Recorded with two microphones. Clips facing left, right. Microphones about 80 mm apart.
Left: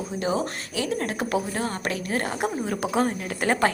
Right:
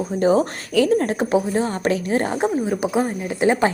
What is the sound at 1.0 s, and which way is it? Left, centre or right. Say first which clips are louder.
A woman's voice: right 7 dB; right.